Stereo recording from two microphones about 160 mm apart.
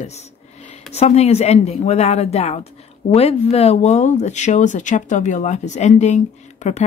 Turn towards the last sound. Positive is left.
turn(degrees=45)  # may be behind; listen again after turning